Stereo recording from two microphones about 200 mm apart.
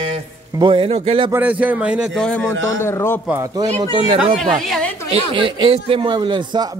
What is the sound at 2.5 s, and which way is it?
Speech, 70° right (ahead or behind).